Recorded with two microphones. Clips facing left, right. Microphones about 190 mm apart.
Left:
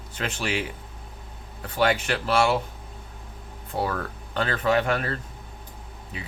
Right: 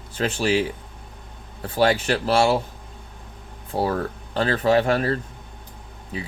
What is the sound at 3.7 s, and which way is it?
Speech, 35° right (ahead or behind).